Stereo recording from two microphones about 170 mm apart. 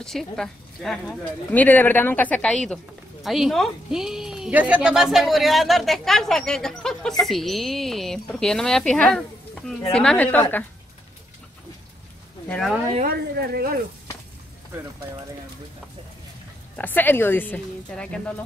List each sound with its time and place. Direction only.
0.0 s a woman's voice: centre (ahead or behind)
12.4 s a woman's voice: centre (ahead or behind)
13.0 s a woman's voice: 65° right (ahead or behind)
16.7 s speech: 10° left (ahead or behind)